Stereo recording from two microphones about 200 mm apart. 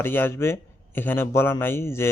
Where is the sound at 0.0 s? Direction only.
10° left (ahead or behind).